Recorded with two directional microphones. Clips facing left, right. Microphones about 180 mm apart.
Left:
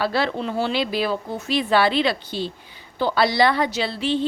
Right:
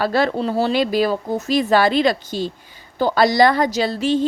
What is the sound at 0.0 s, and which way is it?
A woman's voice, 45° right (ahead or behind).